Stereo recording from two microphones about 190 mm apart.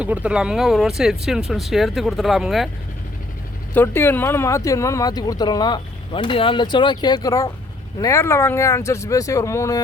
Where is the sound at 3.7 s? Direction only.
10° left (ahead or behind).